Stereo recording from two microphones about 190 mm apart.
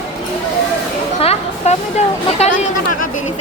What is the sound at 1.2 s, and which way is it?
A woman's voice, 35° left (ahead or behind).